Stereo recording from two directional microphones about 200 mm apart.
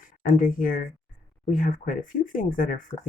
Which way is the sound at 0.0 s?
45° left (ahead or behind).